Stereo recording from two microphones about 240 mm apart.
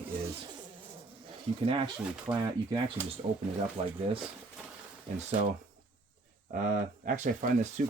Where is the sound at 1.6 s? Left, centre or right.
Right.